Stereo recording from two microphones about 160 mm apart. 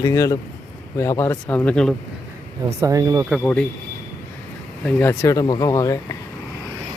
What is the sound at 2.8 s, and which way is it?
Speech, 20° right (ahead or behind).